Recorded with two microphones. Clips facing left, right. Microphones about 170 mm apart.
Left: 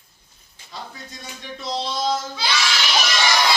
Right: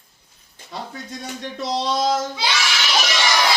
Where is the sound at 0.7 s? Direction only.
70° right (ahead or behind).